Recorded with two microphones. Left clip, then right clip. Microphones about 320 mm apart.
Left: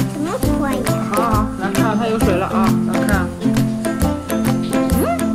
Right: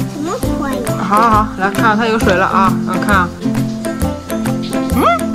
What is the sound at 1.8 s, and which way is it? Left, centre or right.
Music, right.